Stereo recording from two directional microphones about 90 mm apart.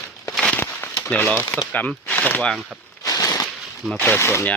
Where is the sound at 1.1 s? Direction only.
15° left (ahead or behind).